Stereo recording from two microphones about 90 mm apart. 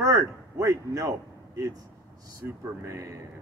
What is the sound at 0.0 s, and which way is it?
A man's voice, 35° right (ahead or behind).